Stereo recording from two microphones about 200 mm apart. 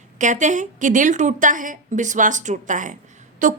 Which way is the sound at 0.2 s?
40° right (ahead or behind).